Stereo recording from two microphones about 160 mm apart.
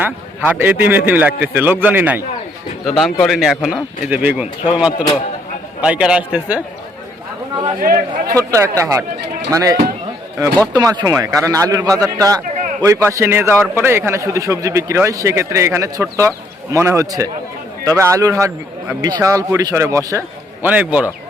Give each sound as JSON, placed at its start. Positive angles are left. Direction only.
{"t": 0.0, "sound": "a man's voice", "side_deg": -10}
{"t": 2.8, "sound": "a man's voice", "side_deg": 0}
{"t": 7.8, "sound": "a man's voice", "side_deg": -65}
{"t": 8.3, "sound": "a man's voice", "side_deg": -20}